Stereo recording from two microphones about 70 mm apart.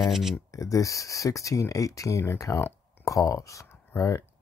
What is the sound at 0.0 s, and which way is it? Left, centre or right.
Speech, centre.